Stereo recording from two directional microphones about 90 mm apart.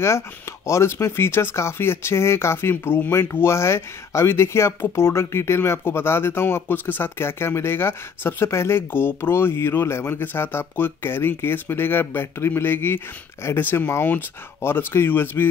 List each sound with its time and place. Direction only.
0.7 s speech: 30° left (ahead or behind)